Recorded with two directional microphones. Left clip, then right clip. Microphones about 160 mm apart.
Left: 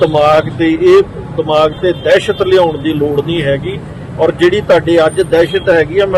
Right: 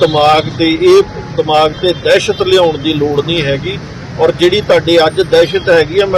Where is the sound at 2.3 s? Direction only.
15° right (ahead or behind).